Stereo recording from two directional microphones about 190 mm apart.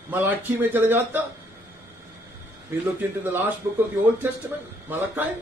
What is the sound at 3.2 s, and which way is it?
Speech, 10° right (ahead or behind).